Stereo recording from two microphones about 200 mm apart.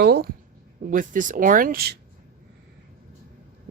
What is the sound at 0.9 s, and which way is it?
Speech, 40° right (ahead or behind).